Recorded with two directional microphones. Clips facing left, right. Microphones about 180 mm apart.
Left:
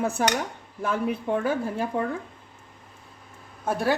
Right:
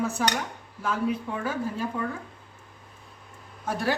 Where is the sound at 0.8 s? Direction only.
55° left (ahead or behind).